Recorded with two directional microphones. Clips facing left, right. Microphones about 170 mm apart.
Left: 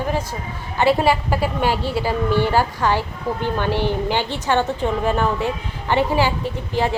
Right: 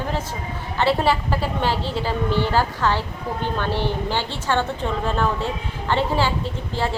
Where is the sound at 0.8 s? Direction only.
15° left (ahead or behind).